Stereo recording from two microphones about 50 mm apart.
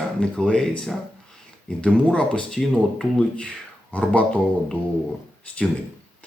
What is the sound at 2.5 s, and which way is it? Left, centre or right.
Speech, centre.